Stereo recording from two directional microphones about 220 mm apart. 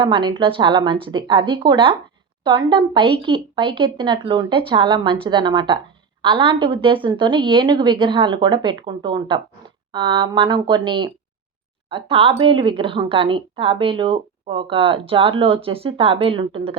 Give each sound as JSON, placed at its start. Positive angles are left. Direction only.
{"t": 0.0, "sound": "a woman's voice", "side_deg": -20}